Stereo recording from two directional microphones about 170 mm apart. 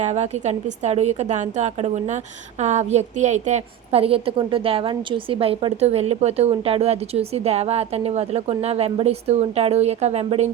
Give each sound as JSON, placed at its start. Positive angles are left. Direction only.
{"t": 0.0, "sound": "a woman's voice", "side_deg": -40}